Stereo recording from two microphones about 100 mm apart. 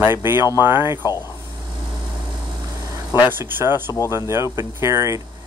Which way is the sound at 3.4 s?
25° right (ahead or behind).